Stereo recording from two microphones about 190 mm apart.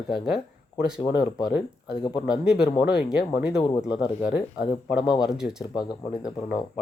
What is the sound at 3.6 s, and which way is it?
Speech, 25° left (ahead or behind).